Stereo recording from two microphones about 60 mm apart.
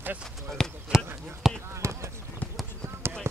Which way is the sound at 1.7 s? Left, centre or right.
Right.